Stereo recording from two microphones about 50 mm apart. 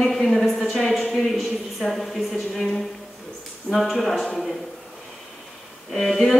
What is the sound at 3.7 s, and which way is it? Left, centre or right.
Speech, centre.